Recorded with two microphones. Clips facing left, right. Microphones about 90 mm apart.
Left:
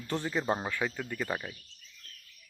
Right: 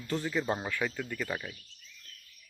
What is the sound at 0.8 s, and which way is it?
Speech, 10° left (ahead or behind).